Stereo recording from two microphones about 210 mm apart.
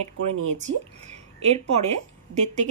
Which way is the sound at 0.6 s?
35° right (ahead or behind).